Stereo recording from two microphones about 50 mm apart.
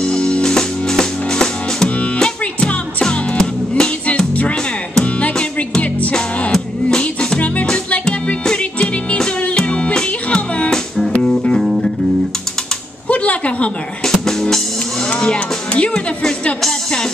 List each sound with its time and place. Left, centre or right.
0.0 s music: centre
5.0 s music: left
6.5 s music: centre
11.6 s music: centre
13.1 s a sound: left
14.0 s music: centre
15.9 s music: centre